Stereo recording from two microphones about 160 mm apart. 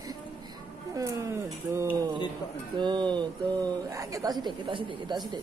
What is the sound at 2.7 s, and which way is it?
Speech, 30° right (ahead or behind).